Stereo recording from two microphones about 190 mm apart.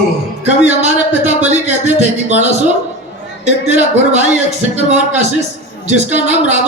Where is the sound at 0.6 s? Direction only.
35° right (ahead or behind).